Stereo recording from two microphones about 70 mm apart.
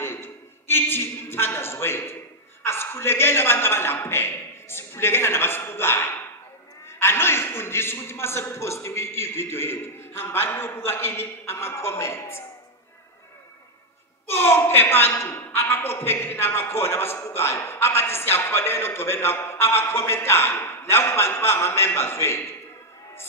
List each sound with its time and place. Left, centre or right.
0.0 s a sound: left
2.6 s a man's voice: left
14.3 s a woman's voice: left